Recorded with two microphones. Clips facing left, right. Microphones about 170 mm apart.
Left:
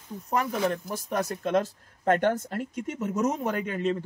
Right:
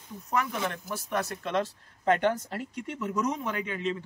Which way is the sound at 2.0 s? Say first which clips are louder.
Left 2 dB; 50° left (ahead or behind).